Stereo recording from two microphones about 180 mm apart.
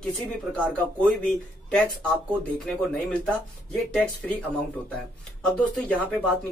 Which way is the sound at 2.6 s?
5° left (ahead or behind).